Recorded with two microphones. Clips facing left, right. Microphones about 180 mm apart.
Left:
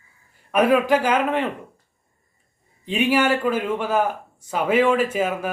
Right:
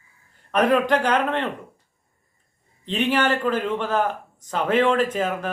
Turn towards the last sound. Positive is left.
turn(degrees=10)  # may be behind; listen again after turning